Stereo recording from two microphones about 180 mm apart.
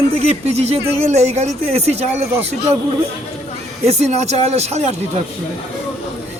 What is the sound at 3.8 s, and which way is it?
A man's voice, 35° right (ahead or behind).